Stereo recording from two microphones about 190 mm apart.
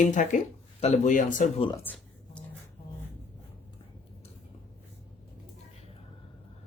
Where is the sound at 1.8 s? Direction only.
10° left (ahead or behind).